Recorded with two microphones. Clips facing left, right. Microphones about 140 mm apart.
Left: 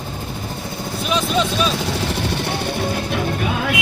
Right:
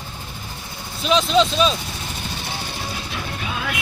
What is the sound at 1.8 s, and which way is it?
Music, 80° left.